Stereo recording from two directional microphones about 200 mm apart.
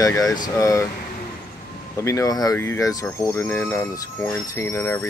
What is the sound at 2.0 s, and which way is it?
Speech, 15° left (ahead or behind).